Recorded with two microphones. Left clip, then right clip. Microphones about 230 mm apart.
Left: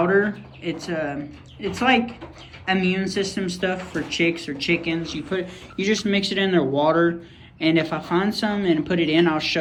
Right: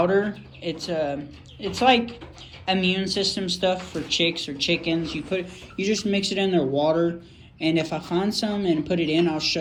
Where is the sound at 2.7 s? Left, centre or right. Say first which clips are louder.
Left 1 dB; left.